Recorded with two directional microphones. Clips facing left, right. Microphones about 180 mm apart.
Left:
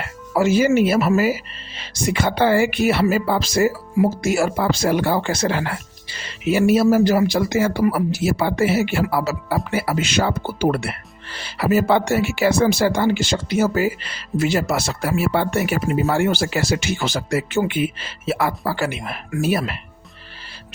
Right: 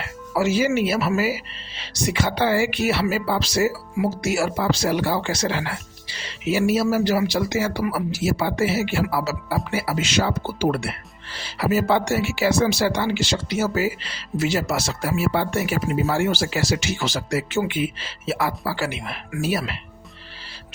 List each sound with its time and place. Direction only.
0.0 s speech: 50° left (ahead or behind)